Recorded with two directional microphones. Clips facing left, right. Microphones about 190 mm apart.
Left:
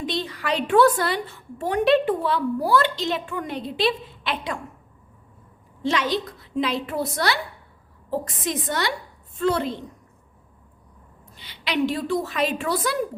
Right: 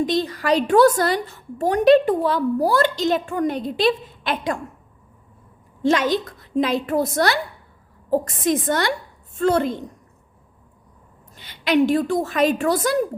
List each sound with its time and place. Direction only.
0.0 s a woman's voice: 40° right (ahead or behind)
5.8 s a woman's voice: 45° right (ahead or behind)
8.4 s a woman's voice: 50° right (ahead or behind)
11.3 s a woman's voice: 50° right (ahead or behind)